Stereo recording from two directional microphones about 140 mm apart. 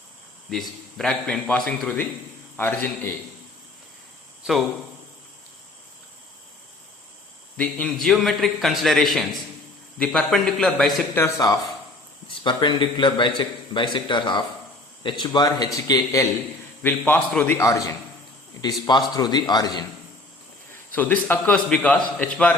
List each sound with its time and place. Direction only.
0.5 s a man's voice: centre (ahead or behind)
2.6 s a man's voice: 15° left (ahead or behind)
7.5 s a man's voice: 10° left (ahead or behind)
11.1 s a man's voice: 20° left (ahead or behind)
20.9 s a man's voice: 10° left (ahead or behind)